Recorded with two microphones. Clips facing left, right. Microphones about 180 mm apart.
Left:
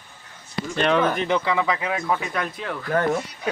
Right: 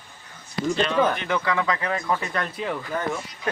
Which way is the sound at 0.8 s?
60° left (ahead or behind).